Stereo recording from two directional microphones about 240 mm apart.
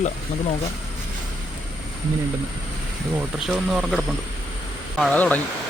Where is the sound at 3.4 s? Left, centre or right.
Centre.